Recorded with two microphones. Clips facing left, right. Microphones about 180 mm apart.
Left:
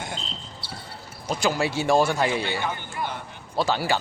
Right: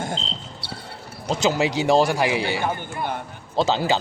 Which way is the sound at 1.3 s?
20° right (ahead or behind).